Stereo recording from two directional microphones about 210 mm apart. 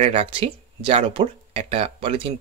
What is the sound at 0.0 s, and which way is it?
Speech, 30° right (ahead or behind).